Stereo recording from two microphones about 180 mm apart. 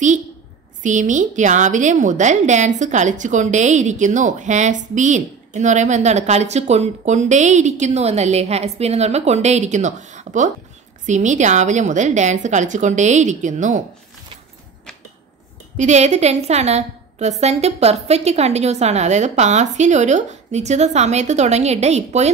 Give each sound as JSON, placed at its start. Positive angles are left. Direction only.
{"t": 0.8, "sound": "a woman's voice", "side_deg": -45}
{"t": 15.8, "sound": "a woman's voice", "side_deg": -40}